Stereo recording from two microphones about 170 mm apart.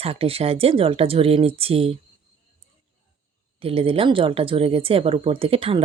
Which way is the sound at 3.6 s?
35° right (ahead or behind).